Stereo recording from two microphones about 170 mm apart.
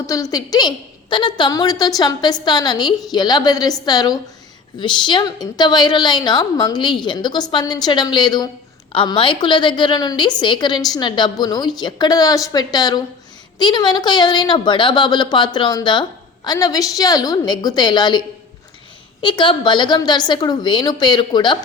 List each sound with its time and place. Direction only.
0.0 s a woman's voice: 20° left (ahead or behind)
19.2 s a woman's voice: 30° left (ahead or behind)